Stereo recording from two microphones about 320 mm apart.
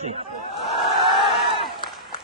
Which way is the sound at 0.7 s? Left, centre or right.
Centre.